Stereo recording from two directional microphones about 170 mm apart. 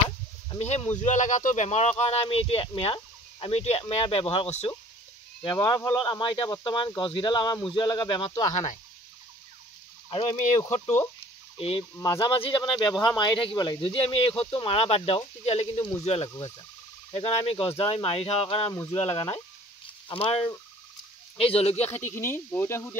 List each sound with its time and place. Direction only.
0.6 s speech: 40° left (ahead or behind)
5.4 s speech: 25° left (ahead or behind)
10.0 s speech: 30° left (ahead or behind)
12.0 s speech: 20° left (ahead or behind)
12.4 s speech: 30° left (ahead or behind)
18.7 s speech: 20° left (ahead or behind)
20.1 s speech: 35° left (ahead or behind)
21.8 s speech: 15° left (ahead or behind)